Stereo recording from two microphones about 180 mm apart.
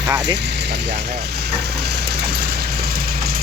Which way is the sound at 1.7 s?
65° right (ahead or behind).